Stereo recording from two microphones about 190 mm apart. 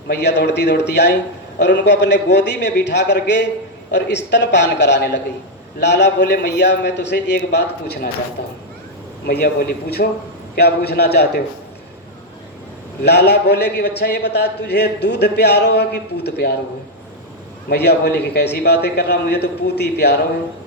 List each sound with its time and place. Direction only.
0.1 s a man's voice: 65° left (ahead or behind)
9.2 s a man's voice: 50° left (ahead or behind)
13.0 s a man's voice: 60° left (ahead or behind)
17.7 s a man's voice: 60° left (ahead or behind)